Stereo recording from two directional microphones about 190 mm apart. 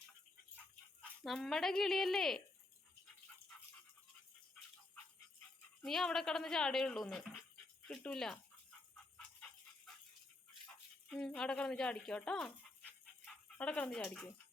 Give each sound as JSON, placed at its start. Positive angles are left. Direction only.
{"t": 1.2, "sound": "speech", "side_deg": 0}
{"t": 5.8, "sound": "speech", "side_deg": 0}
{"t": 9.1, "sound": "dog", "side_deg": 5}
{"t": 11.1, "sound": "speech", "side_deg": 5}